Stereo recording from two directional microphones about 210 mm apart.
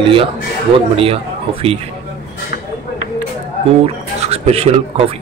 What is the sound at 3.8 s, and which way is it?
Speech, 30° right (ahead or behind).